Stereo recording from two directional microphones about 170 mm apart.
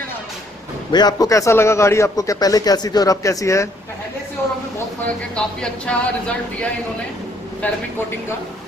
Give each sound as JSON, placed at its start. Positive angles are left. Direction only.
{"t": 0.9, "sound": "a man's voice", "side_deg": 20}
{"t": 5.3, "sound": "a man's voice", "side_deg": 5}